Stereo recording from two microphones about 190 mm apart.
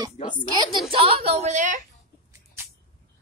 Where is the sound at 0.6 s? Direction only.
35° right (ahead or behind).